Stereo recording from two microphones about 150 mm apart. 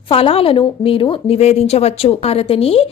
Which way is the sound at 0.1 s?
40° left (ahead or behind).